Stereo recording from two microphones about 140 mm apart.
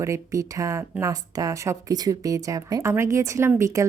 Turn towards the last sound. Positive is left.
turn(degrees=-20)  # may be behind; listen again after turning